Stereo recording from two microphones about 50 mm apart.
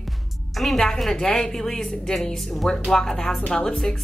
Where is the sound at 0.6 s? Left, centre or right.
Centre.